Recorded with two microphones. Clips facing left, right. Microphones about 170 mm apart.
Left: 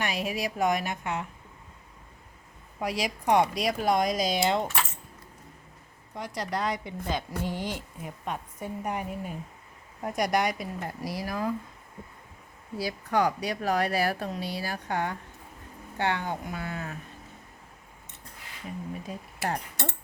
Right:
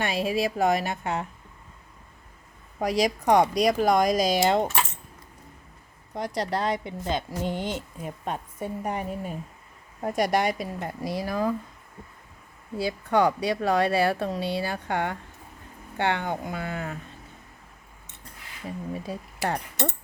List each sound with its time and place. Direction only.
0.0 s a woman's voice: 30° right (ahead or behind)
2.7 s speech: 40° right (ahead or behind)
6.1 s a woman's voice: 35° right (ahead or behind)
12.7 s speech: 25° right (ahead or behind)
18.9 s speech: 30° right (ahead or behind)
19.7 s speech: 20° right (ahead or behind)